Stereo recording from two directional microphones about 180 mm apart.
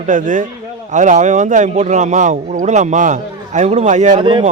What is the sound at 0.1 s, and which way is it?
A man's voice, 45° right (ahead or behind).